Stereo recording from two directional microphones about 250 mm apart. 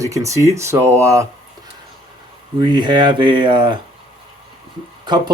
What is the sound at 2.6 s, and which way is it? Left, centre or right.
Speech, centre.